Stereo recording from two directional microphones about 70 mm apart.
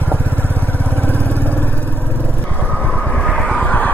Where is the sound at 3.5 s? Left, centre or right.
Left.